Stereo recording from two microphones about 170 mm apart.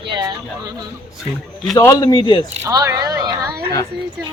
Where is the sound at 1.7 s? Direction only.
20° left (ahead or behind).